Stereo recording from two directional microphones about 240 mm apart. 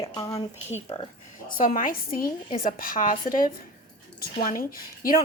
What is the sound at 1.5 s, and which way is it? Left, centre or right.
A woman's voice, left.